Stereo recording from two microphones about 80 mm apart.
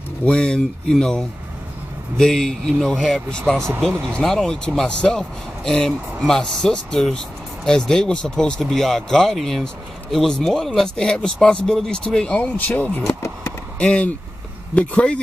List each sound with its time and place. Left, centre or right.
0.2 s speech: centre
13.0 s a sound: left
13.7 s speech: centre